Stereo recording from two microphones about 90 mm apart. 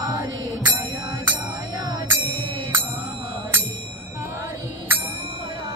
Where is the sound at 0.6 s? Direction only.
20° right (ahead or behind).